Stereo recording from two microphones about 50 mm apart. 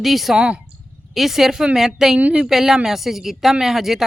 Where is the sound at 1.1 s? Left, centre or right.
Centre.